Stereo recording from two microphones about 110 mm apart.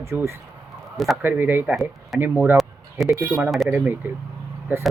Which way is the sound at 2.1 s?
Centre (ahead or behind).